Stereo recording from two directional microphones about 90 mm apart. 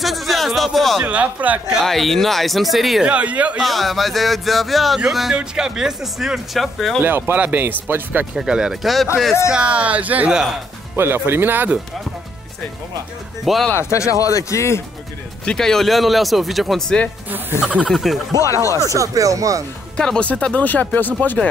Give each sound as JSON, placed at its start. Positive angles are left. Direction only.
{"t": 0.0, "sound": "speech", "side_deg": 0}
{"t": 1.0, "sound": "speech", "side_deg": -15}
{"t": 1.7, "sound": "speech", "side_deg": 0}
{"t": 3.1, "sound": "speech", "side_deg": -15}
{"t": 3.6, "sound": "speech", "side_deg": 0}
{"t": 7.0, "sound": "speech", "side_deg": -25}
{"t": 8.4, "sound": "speech", "side_deg": -10}
{"t": 13.7, "sound": "speech", "side_deg": 35}
{"t": 15.4, "sound": "speech", "side_deg": 5}
{"t": 18.4, "sound": "speech", "side_deg": 35}
{"t": 18.9, "sound": "speech", "side_deg": -40}
{"t": 20.0, "sound": "speech", "side_deg": 10}